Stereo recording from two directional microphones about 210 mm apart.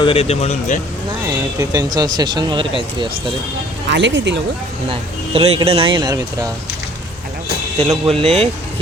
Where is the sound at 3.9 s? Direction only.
60° right (ahead or behind).